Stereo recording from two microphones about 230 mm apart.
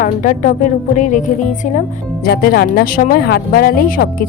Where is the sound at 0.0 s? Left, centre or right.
Left.